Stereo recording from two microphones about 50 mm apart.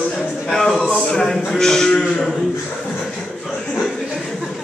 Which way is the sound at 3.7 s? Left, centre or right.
Centre.